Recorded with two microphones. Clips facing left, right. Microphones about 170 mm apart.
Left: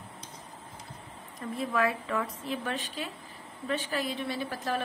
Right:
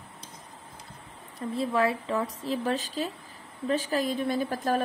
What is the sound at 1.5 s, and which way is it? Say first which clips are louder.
A woman's voice: right 3 dB; 30° right (ahead or behind).